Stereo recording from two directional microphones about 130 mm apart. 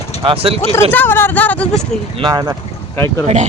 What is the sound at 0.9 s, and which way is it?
Speech, 15° left (ahead or behind).